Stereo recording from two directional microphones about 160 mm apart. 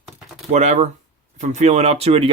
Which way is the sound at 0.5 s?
45° right (ahead or behind).